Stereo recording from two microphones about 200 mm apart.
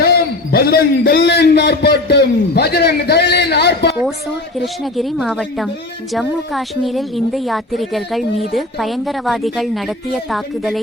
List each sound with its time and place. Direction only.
0.0 s a man's voice: 50° left (ahead or behind)
4.6 s a woman's voice: centre (ahead or behind)